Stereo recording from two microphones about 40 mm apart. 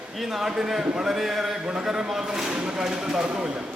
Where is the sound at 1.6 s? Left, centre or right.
Centre.